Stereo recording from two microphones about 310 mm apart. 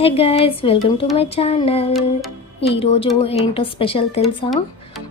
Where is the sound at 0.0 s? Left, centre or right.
Centre.